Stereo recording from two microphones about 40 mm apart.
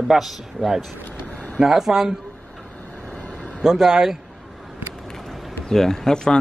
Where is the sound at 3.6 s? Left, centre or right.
Centre.